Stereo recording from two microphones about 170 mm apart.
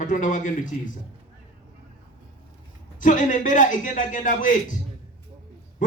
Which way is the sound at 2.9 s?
50° left (ahead or behind).